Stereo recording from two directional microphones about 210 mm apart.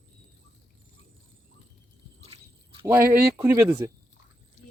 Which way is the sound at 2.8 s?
10° right (ahead or behind).